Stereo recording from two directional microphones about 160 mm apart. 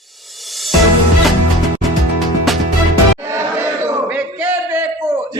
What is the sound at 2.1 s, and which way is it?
Music, centre (ahead or behind).